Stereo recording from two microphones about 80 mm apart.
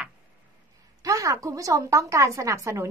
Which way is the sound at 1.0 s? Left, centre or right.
Right.